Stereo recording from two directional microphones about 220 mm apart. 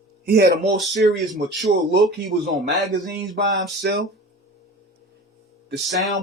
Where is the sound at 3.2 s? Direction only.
50° right (ahead or behind).